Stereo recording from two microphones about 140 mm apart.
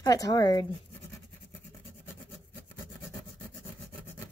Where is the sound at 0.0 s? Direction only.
25° left (ahead or behind).